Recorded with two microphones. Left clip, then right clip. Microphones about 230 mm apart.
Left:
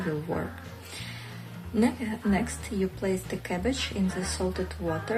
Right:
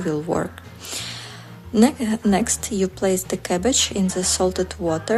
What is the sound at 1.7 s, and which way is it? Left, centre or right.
A woman's voice, right.